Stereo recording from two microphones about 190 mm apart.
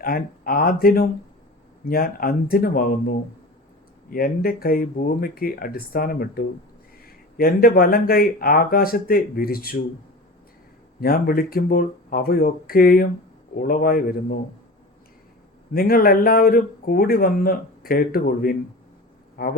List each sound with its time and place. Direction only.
0.0 s a man's voice: 50° left (ahead or behind)
11.0 s a man's voice: 50° left (ahead or behind)
15.7 s a man's voice: 50° left (ahead or behind)